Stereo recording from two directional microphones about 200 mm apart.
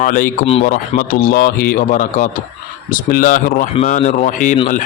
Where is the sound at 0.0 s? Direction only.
40° left (ahead or behind).